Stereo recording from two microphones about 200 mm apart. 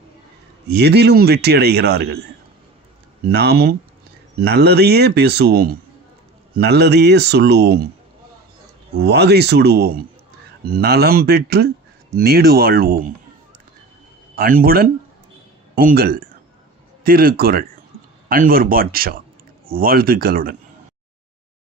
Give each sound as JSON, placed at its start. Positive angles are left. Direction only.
{"t": 0.7, "sound": "a man's voice", "side_deg": -55}
{"t": 3.2, "sound": "a man's voice", "side_deg": -55}
{"t": 9.0, "sound": "a man's voice", "side_deg": -55}
{"t": 14.3, "sound": "speech", "side_deg": -45}